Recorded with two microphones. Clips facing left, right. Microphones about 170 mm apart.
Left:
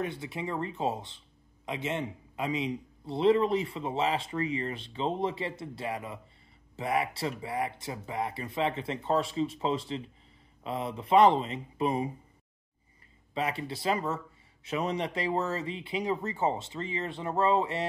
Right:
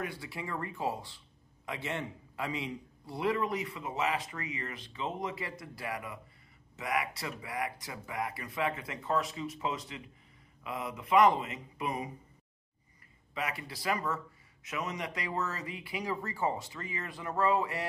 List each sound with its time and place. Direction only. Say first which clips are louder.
0.0 s speech: left 5 dB; 20° left (ahead or behind)
13.3 s speech: left 6 dB; 30° left (ahead or behind)